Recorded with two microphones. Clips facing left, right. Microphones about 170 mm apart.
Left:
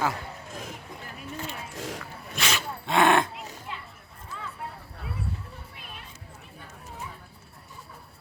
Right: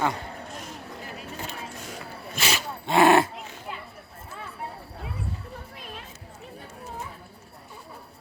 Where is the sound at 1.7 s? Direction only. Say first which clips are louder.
Left 4 dB; 90° left.